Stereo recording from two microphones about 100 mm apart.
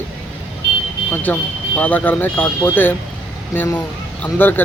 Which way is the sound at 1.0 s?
15° left (ahead or behind).